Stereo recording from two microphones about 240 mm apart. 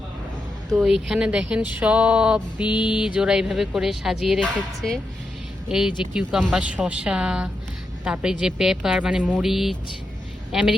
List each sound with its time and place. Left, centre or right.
0.7 s speech: centre